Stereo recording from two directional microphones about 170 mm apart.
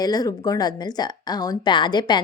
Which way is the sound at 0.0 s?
25° left (ahead or behind).